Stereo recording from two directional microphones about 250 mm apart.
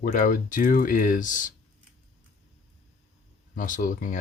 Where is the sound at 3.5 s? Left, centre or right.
Left.